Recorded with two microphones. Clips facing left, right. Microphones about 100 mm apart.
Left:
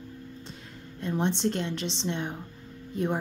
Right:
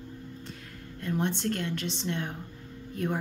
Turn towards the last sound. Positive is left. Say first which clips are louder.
# left 3 dB
turn(degrees=20)  # may be behind; listen again after turning